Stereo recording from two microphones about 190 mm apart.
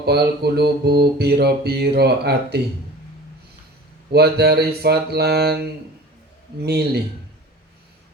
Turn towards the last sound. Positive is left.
turn(degrees=-55)  # may be behind; listen again after turning